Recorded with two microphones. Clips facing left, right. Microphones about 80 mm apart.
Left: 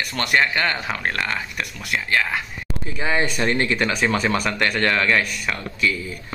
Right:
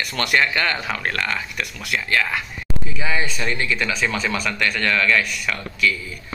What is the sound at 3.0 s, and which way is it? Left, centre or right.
A man's voice, left.